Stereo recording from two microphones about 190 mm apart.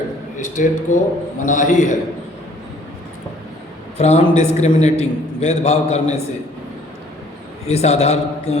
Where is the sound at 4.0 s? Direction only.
35° left (ahead or behind).